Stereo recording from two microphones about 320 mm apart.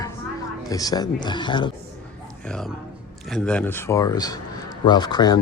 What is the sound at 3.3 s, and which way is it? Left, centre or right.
Speech, centre.